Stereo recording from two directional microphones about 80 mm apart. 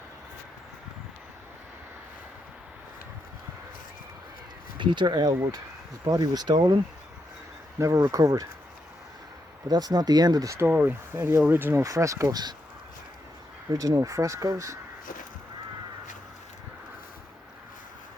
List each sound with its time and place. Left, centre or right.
4.8 s speech: right
7.8 s speech: right
9.6 s speech: right
10.7 s speech: right
11.8 s speech: right
12.3 s speech: right
13.7 s speech: right